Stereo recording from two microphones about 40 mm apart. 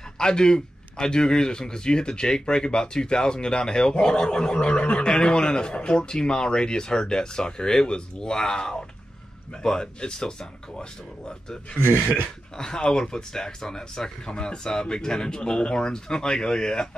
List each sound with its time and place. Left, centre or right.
0.2 s speech: centre
11.8 s speech: right
12.5 s speech: centre